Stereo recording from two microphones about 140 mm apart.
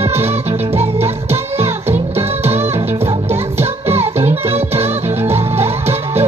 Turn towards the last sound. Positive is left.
turn(degrees=-15)  # may be behind; listen again after turning